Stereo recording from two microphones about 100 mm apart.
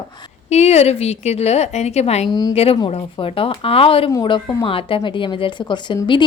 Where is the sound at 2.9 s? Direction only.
65° left (ahead or behind).